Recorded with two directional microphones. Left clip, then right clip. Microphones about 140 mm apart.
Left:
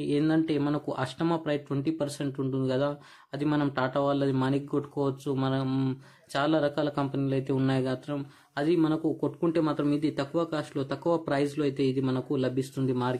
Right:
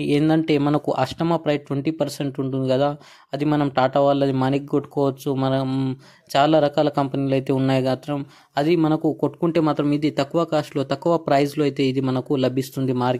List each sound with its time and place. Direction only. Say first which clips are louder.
0.3 s speech: right 8 dB; 50° right (ahead or behind)
5.7 s speech: right 5 dB; 30° right (ahead or behind)
6.3 s speech: right 10 dB; 50° right (ahead or behind)